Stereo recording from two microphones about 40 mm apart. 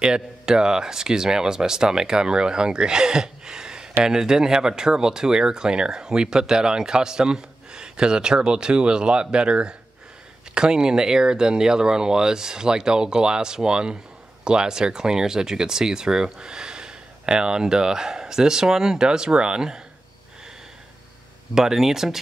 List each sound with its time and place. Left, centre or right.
0.0 s speech: centre
21.5 s speech: centre